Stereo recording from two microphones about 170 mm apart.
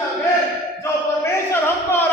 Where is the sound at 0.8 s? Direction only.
15° left (ahead or behind).